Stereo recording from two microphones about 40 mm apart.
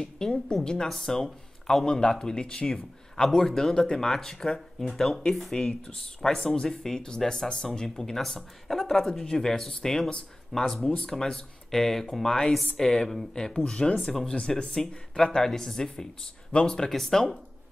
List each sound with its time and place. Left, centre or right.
0.0 s a woman's voice: centre
9.2 s speech: left
14.8 s speech: centre